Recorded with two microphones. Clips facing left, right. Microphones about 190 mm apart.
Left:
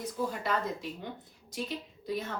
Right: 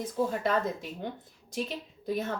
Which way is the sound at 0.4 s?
50° right (ahead or behind).